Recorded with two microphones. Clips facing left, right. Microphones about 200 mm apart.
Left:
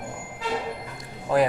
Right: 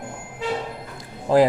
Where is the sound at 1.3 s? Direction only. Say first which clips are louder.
Right 5 dB; 30° right (ahead or behind).